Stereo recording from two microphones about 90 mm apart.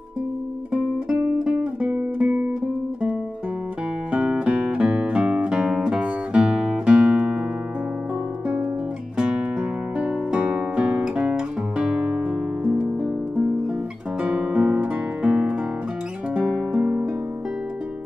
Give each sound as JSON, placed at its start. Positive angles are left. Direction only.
{"t": 0.7, "sound": "music", "side_deg": -10}
{"t": 4.1, "sound": "music", "side_deg": -15}
{"t": 9.1, "sound": "music", "side_deg": -10}
{"t": 14.2, "sound": "guitar", "side_deg": -10}
{"t": 16.3, "sound": "music", "side_deg": -10}